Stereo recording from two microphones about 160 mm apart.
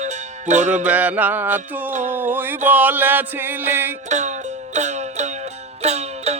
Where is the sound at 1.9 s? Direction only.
50° right (ahead or behind).